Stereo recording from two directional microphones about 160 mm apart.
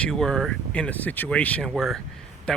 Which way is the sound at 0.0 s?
Centre (ahead or behind).